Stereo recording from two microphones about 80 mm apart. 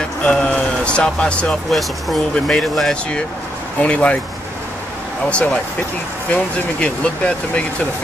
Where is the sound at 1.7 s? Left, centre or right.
Centre.